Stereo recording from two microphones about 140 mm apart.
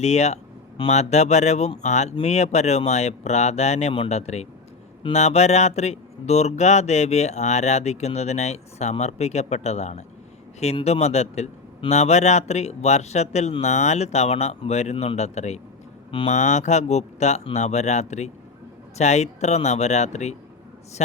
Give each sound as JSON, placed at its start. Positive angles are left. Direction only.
{"t": 0.0, "sound": "a man's voice", "side_deg": 50}